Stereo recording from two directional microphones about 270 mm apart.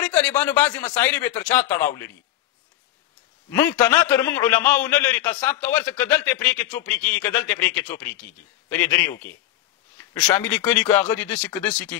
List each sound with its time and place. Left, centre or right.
0.0 s a man's voice: centre
3.5 s a man's voice: centre